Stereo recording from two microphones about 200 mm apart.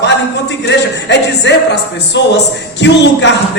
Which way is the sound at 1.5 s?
60° left (ahead or behind).